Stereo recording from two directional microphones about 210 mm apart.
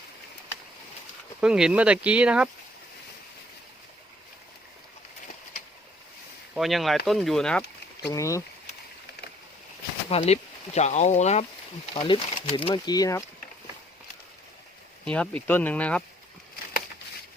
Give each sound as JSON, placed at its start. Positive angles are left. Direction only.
{"t": 1.4, "sound": "speech", "side_deg": -5}
{"t": 6.5, "sound": "speech", "side_deg": 0}
{"t": 8.0, "sound": "speech", "side_deg": 15}
{"t": 10.1, "sound": "speech", "side_deg": 30}
{"t": 15.0, "sound": "speech", "side_deg": 5}